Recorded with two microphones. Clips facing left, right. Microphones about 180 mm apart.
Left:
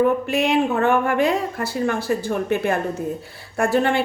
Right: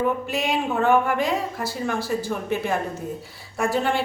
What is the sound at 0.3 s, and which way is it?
Speech, 60° left (ahead or behind).